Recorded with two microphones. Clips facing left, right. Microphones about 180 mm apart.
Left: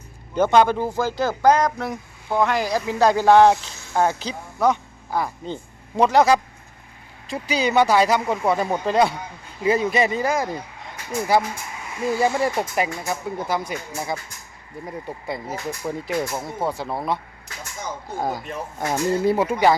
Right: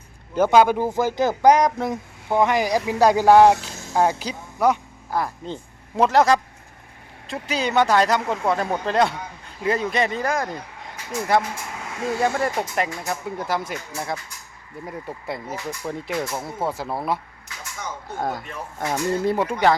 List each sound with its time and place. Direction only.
0.3 s speech: 5° right (ahead or behind)
0.8 s speech: 20° right (ahead or behind); by 10.6 s 5° left (ahead or behind)
12.2 s speech: 5° left (ahead or behind)
18.2 s speech: centre (ahead or behind)